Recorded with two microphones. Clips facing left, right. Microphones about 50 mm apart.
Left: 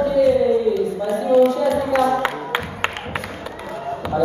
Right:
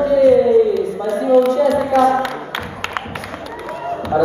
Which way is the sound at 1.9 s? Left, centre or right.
Left.